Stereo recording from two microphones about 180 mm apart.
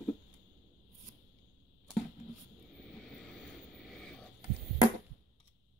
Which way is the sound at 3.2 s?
Centre (ahead or behind).